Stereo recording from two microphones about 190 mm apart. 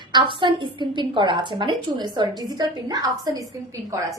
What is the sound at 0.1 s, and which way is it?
A woman's voice, 25° right (ahead or behind).